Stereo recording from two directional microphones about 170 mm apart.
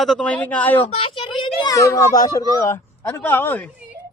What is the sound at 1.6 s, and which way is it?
A woman's voice, 20° left (ahead or behind).